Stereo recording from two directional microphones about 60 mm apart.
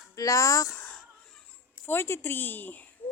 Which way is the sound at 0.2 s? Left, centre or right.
Left.